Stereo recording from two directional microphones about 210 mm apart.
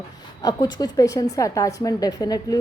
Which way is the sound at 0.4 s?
20° left (ahead or behind).